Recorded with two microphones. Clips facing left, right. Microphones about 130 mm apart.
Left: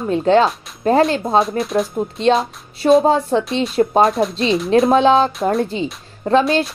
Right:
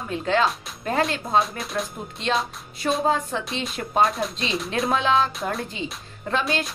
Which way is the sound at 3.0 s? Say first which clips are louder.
Left 8 dB; 35° left (ahead or behind).